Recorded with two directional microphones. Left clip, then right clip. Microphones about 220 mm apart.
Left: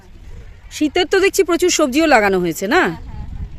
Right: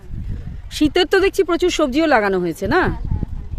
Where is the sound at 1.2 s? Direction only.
15° left (ahead or behind).